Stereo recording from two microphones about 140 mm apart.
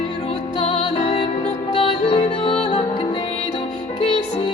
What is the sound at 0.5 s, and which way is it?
Music, 45° left (ahead or behind).